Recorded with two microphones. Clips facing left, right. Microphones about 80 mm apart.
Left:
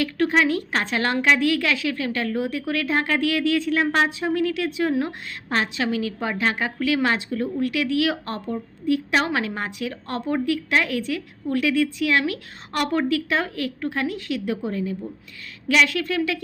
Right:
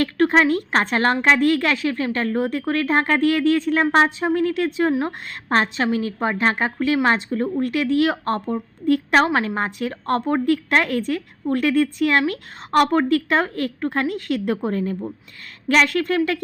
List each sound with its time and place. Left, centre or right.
0.0 s a woman's voice: right